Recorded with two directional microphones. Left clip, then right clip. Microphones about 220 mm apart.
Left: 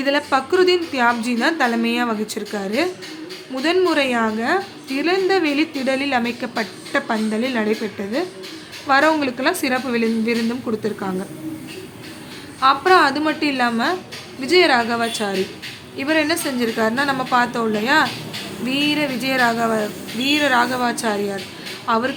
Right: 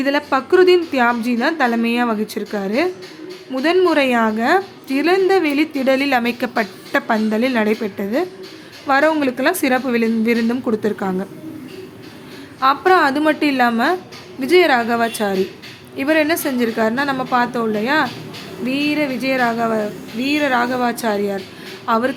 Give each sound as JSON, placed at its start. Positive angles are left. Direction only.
{"t": 0.0, "sound": "a woman's voice", "side_deg": -10}
{"t": 12.5, "sound": "a woman's voice", "side_deg": -10}